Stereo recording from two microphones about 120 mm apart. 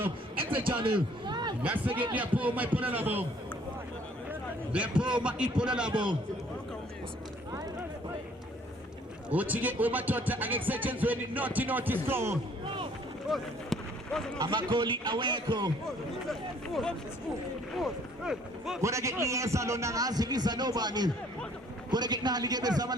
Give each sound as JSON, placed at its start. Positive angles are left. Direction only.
{"t": 0.8, "sound": "a sound", "side_deg": -45}
{"t": 1.6, "sound": "speech", "side_deg": -10}
{"t": 4.3, "sound": "a sound", "side_deg": -10}
{"t": 5.1, "sound": "speech", "side_deg": -10}
{"t": 9.3, "sound": "speech", "side_deg": -15}
{"t": 13.3, "sound": "speech", "side_deg": 5}
{"t": 14.3, "sound": "a man's voice", "side_deg": -40}
{"t": 16.2, "sound": "speech", "side_deg": 0}
{"t": 18.8, "sound": "a man's voice", "side_deg": -25}